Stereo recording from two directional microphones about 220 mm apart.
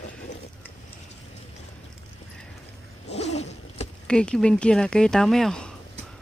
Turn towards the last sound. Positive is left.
turn(degrees=5)  # may be behind; listen again after turning